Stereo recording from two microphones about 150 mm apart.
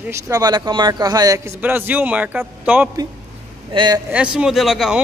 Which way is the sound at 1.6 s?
10° right (ahead or behind).